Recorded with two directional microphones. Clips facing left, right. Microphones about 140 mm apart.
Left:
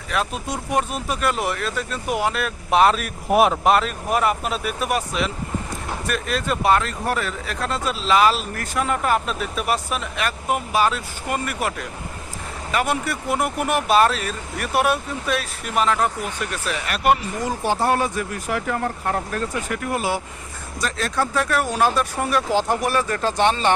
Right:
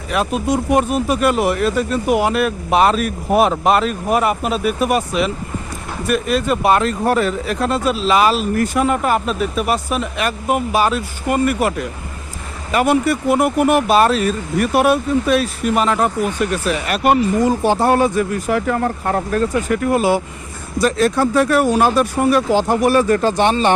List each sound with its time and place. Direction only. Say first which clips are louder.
0.1 s speech: right 7 dB; 15° right (ahead or behind)
17.7 s speech: right 2 dB; 70° right (ahead or behind)
17.9 s speech: right 7 dB; 25° right (ahead or behind)
18.7 s speech: right 5 dB; 70° right (ahead or behind)
19.3 s speech: right 8 dB; 35° right (ahead or behind)
20.7 s speech: right 9 dB; 10° right (ahead or behind)